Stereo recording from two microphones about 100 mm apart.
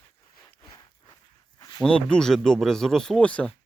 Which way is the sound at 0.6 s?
45° left (ahead or behind).